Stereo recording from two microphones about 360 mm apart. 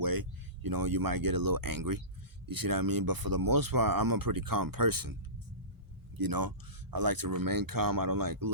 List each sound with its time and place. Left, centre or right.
0.0 s speech: right
6.1 s speech: right